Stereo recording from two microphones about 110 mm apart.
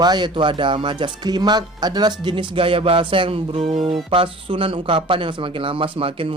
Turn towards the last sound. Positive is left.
turn(degrees=-55)  # may be behind; listen again after turning